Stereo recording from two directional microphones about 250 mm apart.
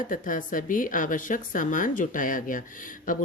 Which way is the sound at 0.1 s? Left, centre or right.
Left.